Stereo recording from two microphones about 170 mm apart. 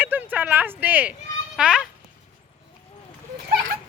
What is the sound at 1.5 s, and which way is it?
Speech, 5° right (ahead or behind).